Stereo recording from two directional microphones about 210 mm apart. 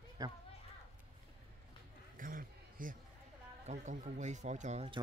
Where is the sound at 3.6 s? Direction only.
35° right (ahead or behind).